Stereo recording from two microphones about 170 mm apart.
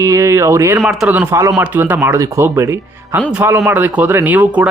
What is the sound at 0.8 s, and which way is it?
Speech, 5° right (ahead or behind).